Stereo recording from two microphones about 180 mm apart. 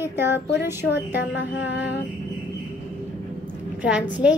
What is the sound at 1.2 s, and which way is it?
Mantra, 90° left.